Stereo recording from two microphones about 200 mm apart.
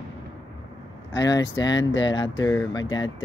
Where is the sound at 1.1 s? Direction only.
20° left (ahead or behind).